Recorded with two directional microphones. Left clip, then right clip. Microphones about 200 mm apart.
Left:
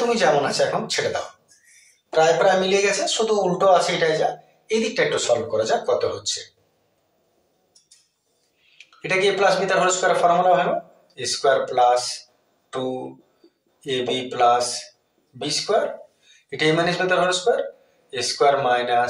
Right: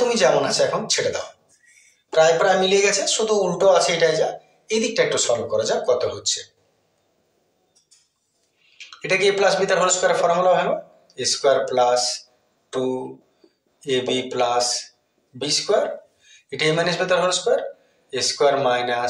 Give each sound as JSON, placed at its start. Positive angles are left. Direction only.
{"t": 0.1, "sound": "speech", "side_deg": -25}
{"t": 2.0, "sound": "speech", "side_deg": -15}
{"t": 8.7, "sound": "speech", "side_deg": -20}
{"t": 12.6, "sound": "a sound", "side_deg": -20}
{"t": 13.7, "sound": "speech", "side_deg": -20}